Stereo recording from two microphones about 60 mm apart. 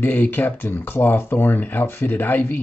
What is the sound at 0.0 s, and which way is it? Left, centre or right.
Speech, left.